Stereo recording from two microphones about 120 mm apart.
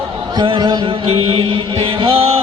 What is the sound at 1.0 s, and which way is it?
Chant, 50° right (ahead or behind).